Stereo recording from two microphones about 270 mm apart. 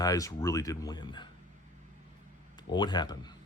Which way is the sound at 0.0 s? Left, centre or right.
Centre.